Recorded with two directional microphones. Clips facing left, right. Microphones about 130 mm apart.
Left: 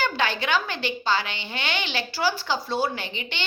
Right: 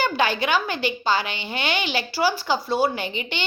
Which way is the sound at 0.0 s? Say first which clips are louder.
Right 3 dB; 10° right (ahead or behind).